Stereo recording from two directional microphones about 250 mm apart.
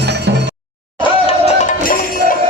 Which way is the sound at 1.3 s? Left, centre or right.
Left.